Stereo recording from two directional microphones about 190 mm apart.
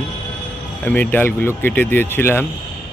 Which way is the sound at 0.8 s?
10° left (ahead or behind).